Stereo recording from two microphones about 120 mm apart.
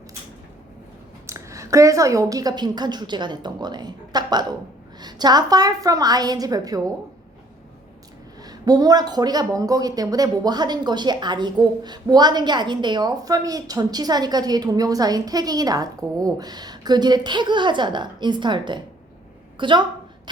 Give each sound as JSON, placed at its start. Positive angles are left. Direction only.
{"t": 1.3, "sound": "speech", "side_deg": -25}
{"t": 8.4, "sound": "a woman's voice", "side_deg": -30}